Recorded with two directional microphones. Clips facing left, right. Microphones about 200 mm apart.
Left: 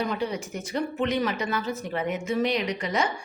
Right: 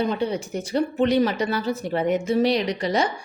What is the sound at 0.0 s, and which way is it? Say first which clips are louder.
Speech: right 4 dB; 30° right (ahead or behind).